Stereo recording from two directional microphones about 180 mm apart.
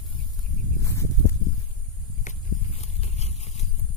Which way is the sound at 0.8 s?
15° left (ahead or behind).